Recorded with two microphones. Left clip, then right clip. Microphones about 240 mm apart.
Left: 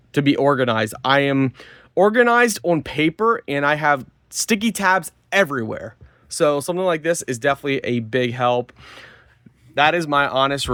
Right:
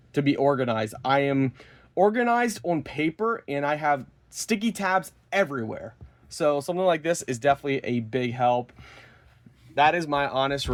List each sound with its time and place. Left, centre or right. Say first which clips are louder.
0.1 s speech: left 5 dB; left